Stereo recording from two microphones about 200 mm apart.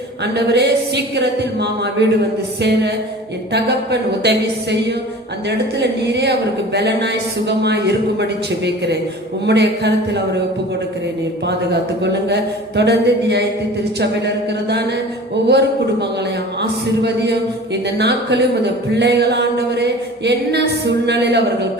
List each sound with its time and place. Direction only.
0.3 s speech: 55° right (ahead or behind)
4.2 s speech: 55° right (ahead or behind)
11.4 s speech: 55° right (ahead or behind)
17.9 s speech: 55° right (ahead or behind)